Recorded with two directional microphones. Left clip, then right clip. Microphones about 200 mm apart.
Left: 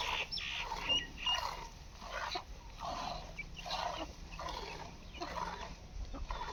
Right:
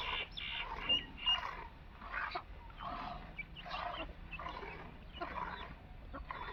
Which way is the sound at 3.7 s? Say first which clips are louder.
Left 3 dB; 5° right (ahead or behind).